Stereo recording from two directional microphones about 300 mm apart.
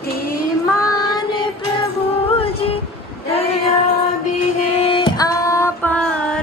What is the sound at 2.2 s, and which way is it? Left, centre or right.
Music, centre.